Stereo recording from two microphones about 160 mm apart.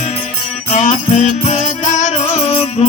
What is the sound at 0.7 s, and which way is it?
Music, 50° left (ahead or behind).